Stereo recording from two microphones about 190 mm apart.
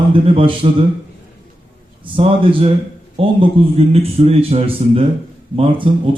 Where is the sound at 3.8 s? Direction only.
30° right (ahead or behind).